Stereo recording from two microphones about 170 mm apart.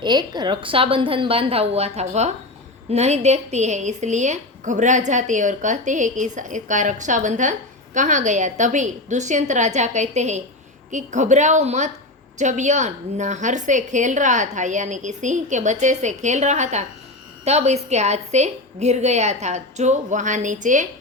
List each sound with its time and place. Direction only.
0.0 s a woman's voice: 25° right (ahead or behind); by 20.8 s 45° right (ahead or behind)